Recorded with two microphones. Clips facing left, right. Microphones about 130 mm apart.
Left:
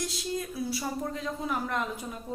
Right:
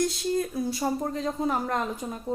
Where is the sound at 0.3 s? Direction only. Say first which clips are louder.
Right 5 dB; 45° right (ahead or behind).